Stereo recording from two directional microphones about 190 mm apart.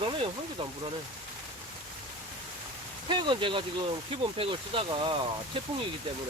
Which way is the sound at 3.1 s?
25° right (ahead or behind).